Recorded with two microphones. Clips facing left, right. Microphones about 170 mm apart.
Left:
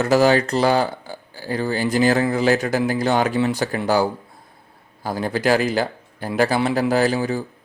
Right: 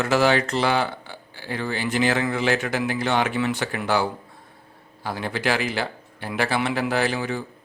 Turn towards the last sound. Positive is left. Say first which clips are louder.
# left 5 dB
turn(degrees=40)  # may be behind; listen again after turning